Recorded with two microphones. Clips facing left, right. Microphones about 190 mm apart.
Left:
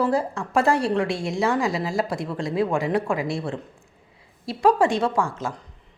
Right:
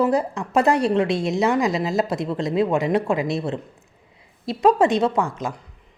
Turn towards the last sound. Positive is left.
turn(degrees=-20)  # may be behind; listen again after turning